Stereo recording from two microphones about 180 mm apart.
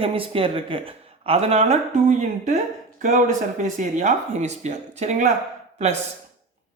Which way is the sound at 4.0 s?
40° right (ahead or behind).